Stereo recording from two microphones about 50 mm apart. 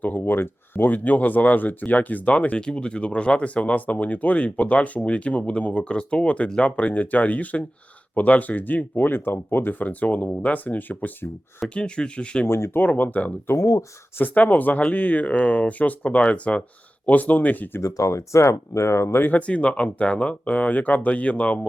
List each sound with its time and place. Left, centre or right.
0.0 s speech: left
11.7 s speech: left
12.5 s speech: left
12.8 s speech: left
17.7 s speech: left
19.2 s speech: left